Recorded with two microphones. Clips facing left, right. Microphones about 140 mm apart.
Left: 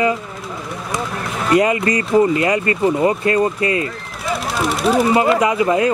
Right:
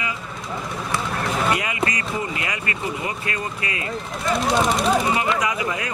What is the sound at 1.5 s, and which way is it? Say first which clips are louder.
Speech: left 9 dB; 35° left (ahead or behind).